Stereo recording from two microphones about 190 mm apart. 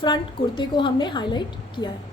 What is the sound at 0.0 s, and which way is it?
A woman's voice, 25° left (ahead or behind).